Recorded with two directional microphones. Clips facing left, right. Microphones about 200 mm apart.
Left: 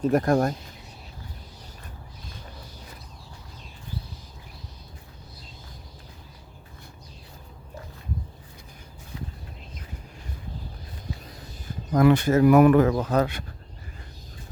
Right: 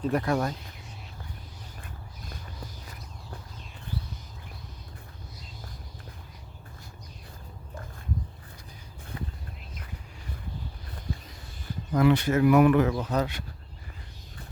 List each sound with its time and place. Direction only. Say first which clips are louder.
0.0 s speech: left 5 dB; 45° left (ahead or behind)
9.1 s a sound: even; 55° right (ahead or behind)
11.9 s speech: left 4 dB; 45° left (ahead or behind)